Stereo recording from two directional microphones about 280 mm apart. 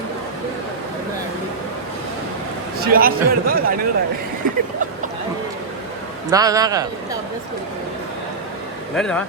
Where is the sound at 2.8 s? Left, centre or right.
Right.